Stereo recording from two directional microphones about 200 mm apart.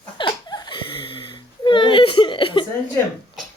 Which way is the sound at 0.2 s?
20° left (ahead or behind).